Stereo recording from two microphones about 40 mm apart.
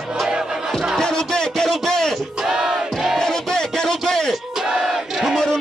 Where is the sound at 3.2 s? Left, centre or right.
Centre.